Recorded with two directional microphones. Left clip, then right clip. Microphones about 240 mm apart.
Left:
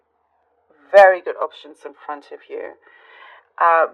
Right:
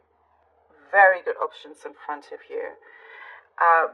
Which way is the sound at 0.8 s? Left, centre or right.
Left.